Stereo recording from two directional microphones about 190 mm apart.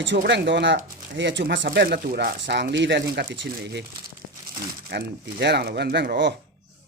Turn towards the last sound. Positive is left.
turn(degrees=-65)  # may be behind; listen again after turning